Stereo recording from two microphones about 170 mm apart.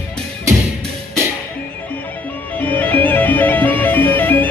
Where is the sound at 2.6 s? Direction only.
10° left (ahead or behind).